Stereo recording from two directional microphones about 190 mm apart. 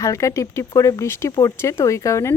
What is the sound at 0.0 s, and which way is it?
Speech, 15° left (ahead or behind).